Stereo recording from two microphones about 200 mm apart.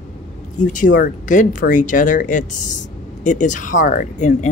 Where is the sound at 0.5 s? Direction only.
40° left (ahead or behind).